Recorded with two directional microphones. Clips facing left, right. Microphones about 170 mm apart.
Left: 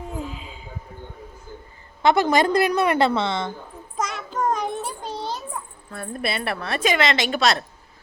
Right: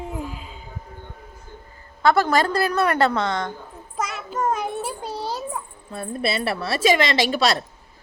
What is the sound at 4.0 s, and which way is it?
Child singing, 5° right (ahead or behind).